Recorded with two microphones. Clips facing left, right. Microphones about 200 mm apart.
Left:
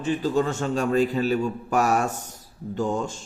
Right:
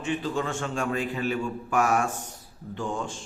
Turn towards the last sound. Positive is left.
turn(degrees=40)  # may be behind; listen again after turning